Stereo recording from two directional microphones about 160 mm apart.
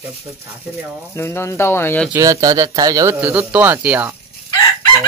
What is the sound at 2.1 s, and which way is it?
Speech, 20° right (ahead or behind).